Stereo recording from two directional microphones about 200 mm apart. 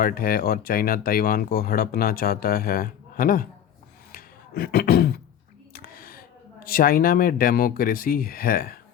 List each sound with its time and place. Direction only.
0.0 s speech: 45° left (ahead or behind)
4.1 s a sound: 50° left (ahead or behind)
5.7 s speech: 45° left (ahead or behind)